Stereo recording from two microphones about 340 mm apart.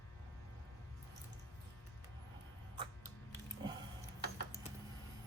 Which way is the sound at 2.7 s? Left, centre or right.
Centre.